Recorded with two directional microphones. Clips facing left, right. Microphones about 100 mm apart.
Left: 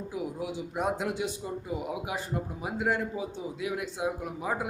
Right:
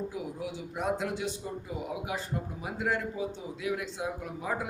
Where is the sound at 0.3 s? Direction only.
15° left (ahead or behind).